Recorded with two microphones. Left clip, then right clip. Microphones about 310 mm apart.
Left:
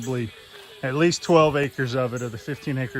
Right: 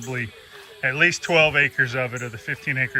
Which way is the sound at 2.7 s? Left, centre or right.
Left.